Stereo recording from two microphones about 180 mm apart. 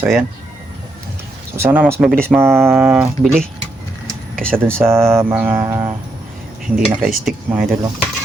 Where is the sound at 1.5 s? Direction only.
10° right (ahead or behind).